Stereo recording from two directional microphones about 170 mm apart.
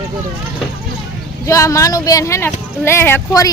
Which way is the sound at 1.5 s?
20° left (ahead or behind).